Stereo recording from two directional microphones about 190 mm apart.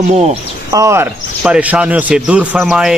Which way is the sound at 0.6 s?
15° right (ahead or behind).